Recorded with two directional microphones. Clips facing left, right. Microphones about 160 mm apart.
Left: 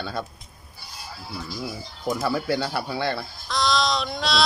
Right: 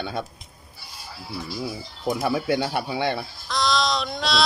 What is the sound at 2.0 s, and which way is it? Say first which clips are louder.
Speech: right 1 dB; 15° right (ahead or behind).